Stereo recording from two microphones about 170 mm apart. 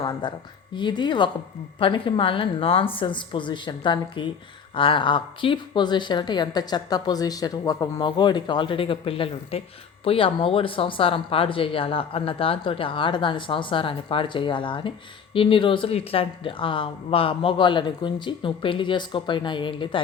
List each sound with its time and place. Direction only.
0.0 s a woman's voice: 25° left (ahead or behind)